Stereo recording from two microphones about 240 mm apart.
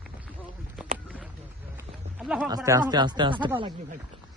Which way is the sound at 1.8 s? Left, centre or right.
Centre.